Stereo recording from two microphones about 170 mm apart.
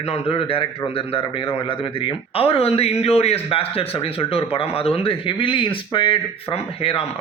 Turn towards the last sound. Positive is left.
turn(degrees=35)  # may be behind; listen again after turning